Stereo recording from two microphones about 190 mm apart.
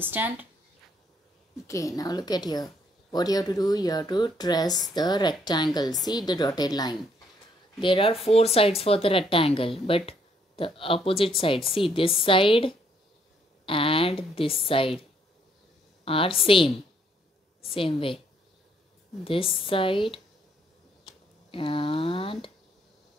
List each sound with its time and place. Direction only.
0.0 s speech: 10° right (ahead or behind)
1.7 s speech: 15° left (ahead or behind)
16.1 s speech: 30° left (ahead or behind)
19.2 s speech: 30° left (ahead or behind)
21.5 s speech: 30° left (ahead or behind)